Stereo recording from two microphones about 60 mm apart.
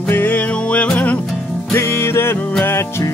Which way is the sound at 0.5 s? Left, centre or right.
Left.